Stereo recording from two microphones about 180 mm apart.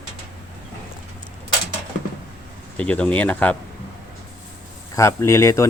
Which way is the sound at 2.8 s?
5° left (ahead or behind).